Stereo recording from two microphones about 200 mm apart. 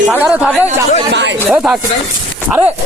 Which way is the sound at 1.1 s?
60° right (ahead or behind).